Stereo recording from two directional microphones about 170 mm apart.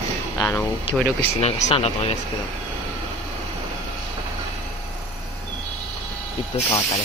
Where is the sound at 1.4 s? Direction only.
40° left (ahead or behind).